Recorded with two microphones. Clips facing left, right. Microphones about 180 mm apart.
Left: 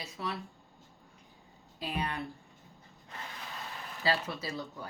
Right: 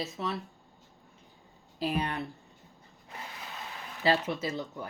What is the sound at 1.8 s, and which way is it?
Speech, 30° right (ahead or behind).